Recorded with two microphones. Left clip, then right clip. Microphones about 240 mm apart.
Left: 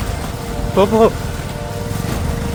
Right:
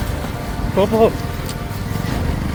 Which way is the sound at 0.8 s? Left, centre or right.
Left.